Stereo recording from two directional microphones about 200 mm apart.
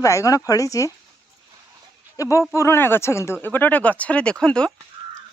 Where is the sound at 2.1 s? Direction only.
15° left (ahead or behind).